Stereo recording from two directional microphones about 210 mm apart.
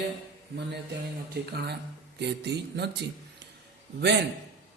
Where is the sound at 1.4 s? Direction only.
50° right (ahead or behind).